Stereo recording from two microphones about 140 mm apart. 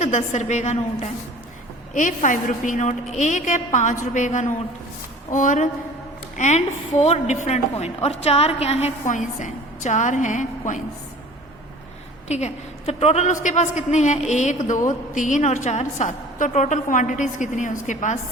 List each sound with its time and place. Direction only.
0.0 s a woman's voice: 55° left (ahead or behind)
1.9 s a woman's voice: 65° left (ahead or behind); by 8.9 s 50° left (ahead or behind)
9.0 s a woman's voice: 60° left (ahead or behind)
12.3 s a woman's voice: 50° left (ahead or behind)